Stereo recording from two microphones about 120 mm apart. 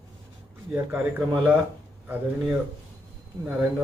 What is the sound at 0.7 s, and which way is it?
A man's voice, 15° right (ahead or behind).